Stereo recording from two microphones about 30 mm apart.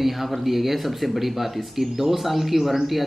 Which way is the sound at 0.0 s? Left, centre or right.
Centre.